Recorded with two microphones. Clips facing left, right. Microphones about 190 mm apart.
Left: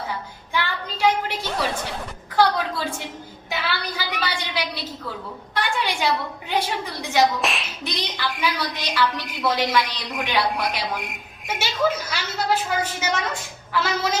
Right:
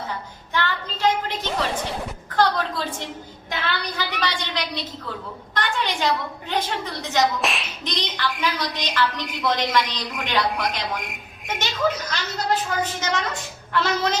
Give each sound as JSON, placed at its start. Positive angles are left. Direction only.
{"t": 0.5, "sound": "a woman's voice", "side_deg": 10}